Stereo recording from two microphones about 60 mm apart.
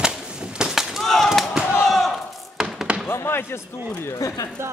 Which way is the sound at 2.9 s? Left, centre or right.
Centre.